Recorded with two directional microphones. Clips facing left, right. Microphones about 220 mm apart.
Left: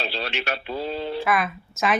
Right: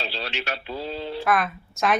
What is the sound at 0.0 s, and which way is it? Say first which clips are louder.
Speech: left 2 dB; 60° left (ahead or behind).